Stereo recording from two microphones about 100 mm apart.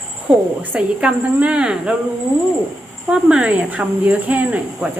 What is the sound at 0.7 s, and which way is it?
A woman's voice, 10° right (ahead or behind).